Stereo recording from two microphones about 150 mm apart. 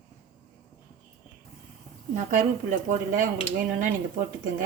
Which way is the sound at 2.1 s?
60° right (ahead or behind).